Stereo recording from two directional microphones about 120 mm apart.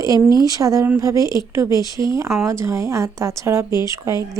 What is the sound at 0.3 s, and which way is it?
A woman's voice, 30° right (ahead or behind).